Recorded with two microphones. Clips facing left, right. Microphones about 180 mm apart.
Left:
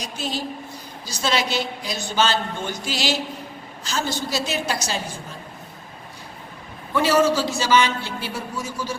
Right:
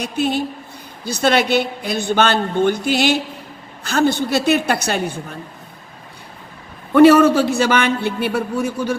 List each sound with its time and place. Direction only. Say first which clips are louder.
0.0 s a woman's voice: right 9 dB; 60° right (ahead or behind)
6.9 s a woman's voice: right 9 dB; 60° right (ahead or behind)